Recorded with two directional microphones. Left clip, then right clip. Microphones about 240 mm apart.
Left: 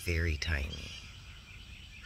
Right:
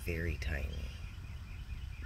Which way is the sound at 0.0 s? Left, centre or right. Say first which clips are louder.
Left 5 dB; centre.